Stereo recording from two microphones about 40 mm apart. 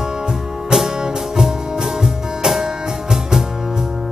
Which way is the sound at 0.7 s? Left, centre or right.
Centre.